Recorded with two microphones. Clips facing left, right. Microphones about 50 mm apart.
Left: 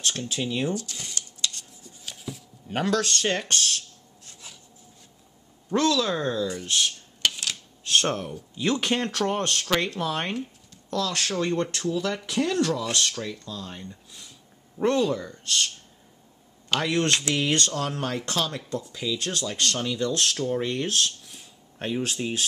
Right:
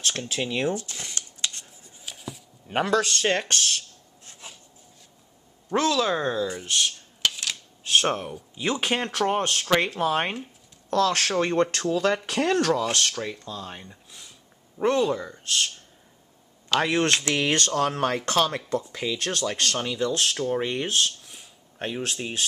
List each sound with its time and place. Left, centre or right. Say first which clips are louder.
0.2 s speech: even; centre
0.7 s shuffling cards: even; right
2.1 s a sound: left 2 dB; centre
2.7 s speech: right 2 dB; centre
3.3 s speech: right 1 dB; right
4.2 s rub: right 2 dB; right
5.7 s speech: even; centre
6.6 s speech: even; centre; by 10.4 s right
10.9 s speech: right 5 dB; right
11.7 s speech: right 3 dB; right
12.1 s speech: right 3 dB; right
12.8 s speech: right 2 dB; right; by 15.7 s centre
17.1 s speech: right 1 dB; right
19.8 s speech: right 1 dB; centre